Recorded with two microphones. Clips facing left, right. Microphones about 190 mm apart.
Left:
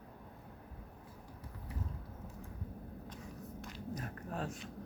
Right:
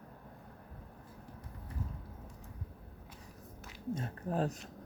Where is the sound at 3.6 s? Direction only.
5° right (ahead or behind).